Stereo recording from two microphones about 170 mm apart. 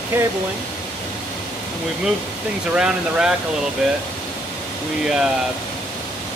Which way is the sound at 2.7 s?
5° right (ahead or behind).